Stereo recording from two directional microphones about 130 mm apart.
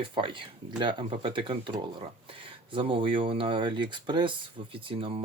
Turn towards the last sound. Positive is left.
turn(degrees=-45)  # may be behind; listen again after turning